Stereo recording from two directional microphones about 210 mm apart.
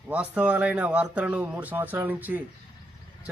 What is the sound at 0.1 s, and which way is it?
A man's voice, 5° right (ahead or behind).